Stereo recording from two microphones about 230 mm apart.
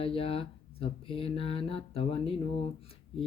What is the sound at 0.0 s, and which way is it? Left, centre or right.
Speech, left.